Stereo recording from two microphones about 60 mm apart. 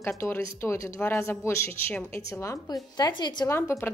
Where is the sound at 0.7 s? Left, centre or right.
Left.